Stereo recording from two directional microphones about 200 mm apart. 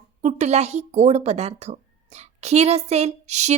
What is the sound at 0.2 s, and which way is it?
Speech, 35° right (ahead or behind).